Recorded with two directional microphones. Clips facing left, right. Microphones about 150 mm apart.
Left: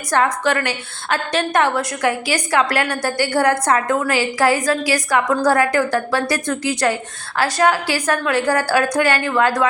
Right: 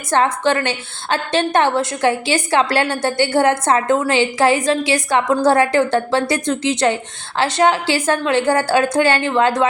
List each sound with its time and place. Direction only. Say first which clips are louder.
0.1 s a woman's voice: right 2 dB; 25° right (ahead or behind)